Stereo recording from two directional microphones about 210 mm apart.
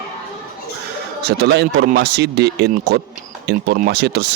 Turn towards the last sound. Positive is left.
turn(degrees=-50)  # may be behind; listen again after turning